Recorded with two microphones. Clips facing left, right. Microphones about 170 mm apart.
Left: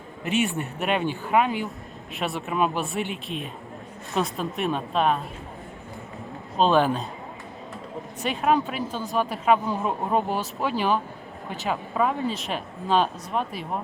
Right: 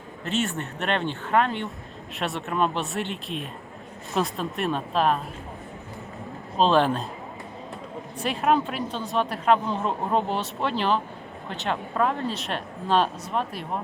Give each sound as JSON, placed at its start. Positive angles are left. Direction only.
{"t": 0.4, "sound": "speech", "side_deg": 0}
{"t": 6.6, "sound": "speech", "side_deg": 5}
{"t": 8.2, "sound": "speech", "side_deg": 0}